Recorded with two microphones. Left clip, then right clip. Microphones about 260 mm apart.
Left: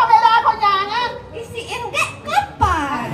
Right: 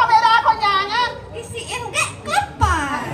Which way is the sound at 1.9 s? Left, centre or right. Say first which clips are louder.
Left 1 dB; right.